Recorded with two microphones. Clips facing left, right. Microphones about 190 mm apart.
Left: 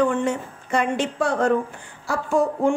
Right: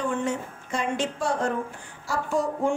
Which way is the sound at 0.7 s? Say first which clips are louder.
Left 5 dB; 60° left (ahead or behind).